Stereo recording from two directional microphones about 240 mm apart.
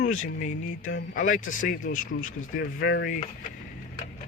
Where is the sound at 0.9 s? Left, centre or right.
Left.